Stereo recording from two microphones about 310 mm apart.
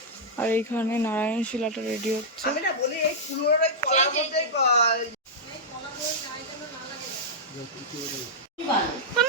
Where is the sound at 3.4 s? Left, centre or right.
Left.